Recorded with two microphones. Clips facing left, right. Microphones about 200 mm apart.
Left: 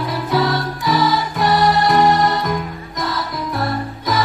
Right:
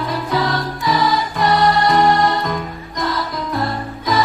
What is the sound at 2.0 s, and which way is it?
Music, 20° left (ahead or behind).